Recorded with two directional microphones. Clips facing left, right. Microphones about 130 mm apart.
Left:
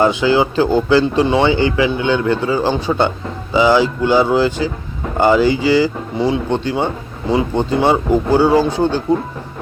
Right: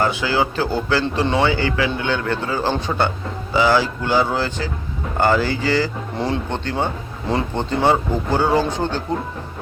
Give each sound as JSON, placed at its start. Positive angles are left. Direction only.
{"t": 0.0, "sound": "speech", "side_deg": 20}